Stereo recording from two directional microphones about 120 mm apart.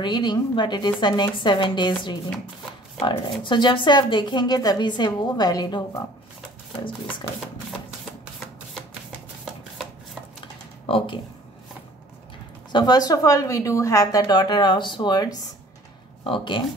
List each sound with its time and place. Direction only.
0.0 s a woman's voice: 35° left (ahead or behind)
3.4 s a woman's voice: 40° left (ahead or behind)
6.8 s speech: 45° left (ahead or behind)
10.9 s speech: 50° left (ahead or behind)
12.7 s a woman's voice: 35° left (ahead or behind)
14.3 s a woman's voice: 35° left (ahead or behind)
16.3 s speech: 45° left (ahead or behind)